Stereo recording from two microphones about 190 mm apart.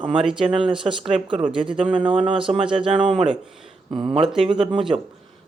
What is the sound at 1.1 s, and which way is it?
Speech, 25° right (ahead or behind).